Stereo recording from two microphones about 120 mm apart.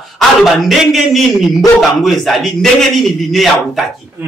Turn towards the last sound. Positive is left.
turn(degrees=0)  # may be behind; listen again after turning